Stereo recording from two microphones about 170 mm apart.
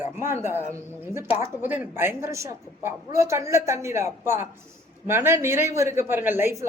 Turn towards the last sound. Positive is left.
turn(degrees=-15)  # may be behind; listen again after turning